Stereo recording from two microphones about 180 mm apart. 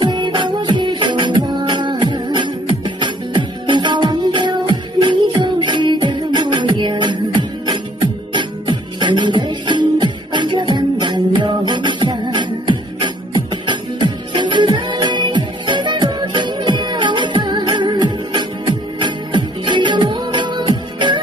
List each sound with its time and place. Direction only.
0.0 s music: 25° right (ahead or behind)